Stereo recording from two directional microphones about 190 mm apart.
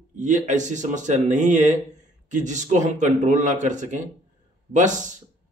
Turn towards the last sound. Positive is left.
turn(degrees=-40)  # may be behind; listen again after turning